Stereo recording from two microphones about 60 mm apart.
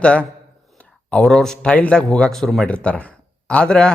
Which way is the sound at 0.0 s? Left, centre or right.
Centre.